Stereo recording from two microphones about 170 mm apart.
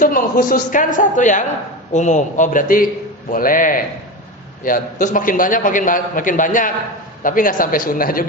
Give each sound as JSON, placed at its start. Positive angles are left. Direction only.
{"t": 0.0, "sound": "a man's voice", "side_deg": 55}